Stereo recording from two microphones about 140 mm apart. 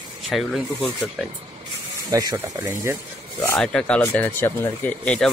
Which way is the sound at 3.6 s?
5° left (ahead or behind).